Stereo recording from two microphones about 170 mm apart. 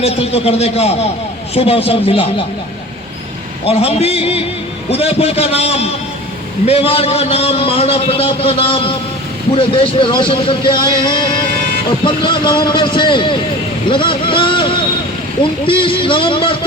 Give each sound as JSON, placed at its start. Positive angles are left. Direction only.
{"t": 0.0, "sound": "a man's voice", "side_deg": 35}
{"t": 3.7, "sound": "a man's voice", "side_deg": 35}